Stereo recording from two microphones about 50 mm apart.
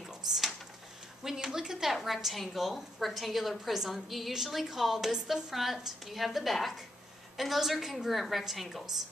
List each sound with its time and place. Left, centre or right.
1.2 s a woman's voice: centre
2.0 s a woman's voice: centre